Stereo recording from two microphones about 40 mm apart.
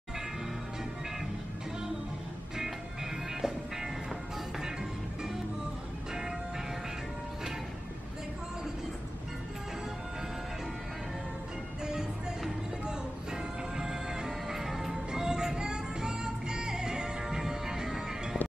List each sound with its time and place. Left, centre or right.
3.3 s music: centre
11.8 s music: centre
14.6 s music: centre
15.0 s music: centre